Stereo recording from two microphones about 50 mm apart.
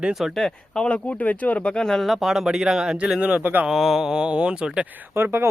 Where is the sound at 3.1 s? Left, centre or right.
Right.